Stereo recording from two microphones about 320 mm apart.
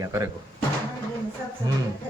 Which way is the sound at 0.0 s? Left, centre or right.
Centre.